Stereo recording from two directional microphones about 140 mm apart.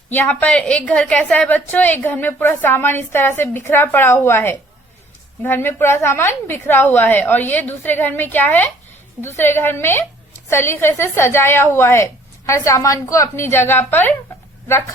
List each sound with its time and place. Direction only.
0.1 s a woman's voice: 10° left (ahead or behind)